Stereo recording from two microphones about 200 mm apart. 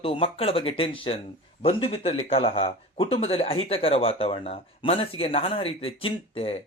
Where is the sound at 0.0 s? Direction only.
30° left (ahead or behind).